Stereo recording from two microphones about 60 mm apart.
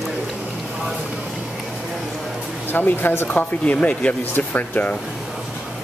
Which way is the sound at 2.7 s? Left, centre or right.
Left.